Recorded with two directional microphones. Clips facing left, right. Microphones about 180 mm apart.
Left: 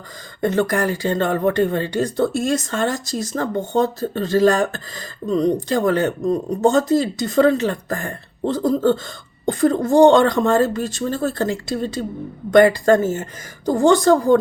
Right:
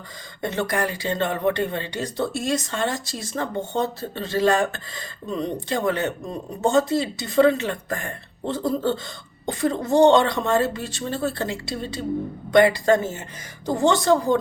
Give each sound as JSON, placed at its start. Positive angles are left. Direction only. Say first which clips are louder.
{"t": 0.4, "sound": "speech", "louder": "left 6 dB", "side_deg": 45}